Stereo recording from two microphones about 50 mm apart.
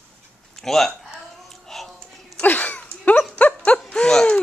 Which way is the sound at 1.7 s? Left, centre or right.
Centre.